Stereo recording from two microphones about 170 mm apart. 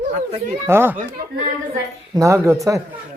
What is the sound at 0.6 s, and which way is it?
Speech, 15° right (ahead or behind).